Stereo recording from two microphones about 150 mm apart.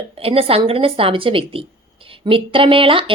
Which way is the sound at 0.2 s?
40° right (ahead or behind).